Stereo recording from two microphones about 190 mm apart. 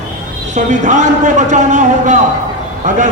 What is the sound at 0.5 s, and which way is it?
A man's voice, 40° right (ahead or behind).